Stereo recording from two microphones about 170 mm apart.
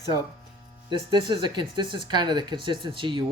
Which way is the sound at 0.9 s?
25° right (ahead or behind).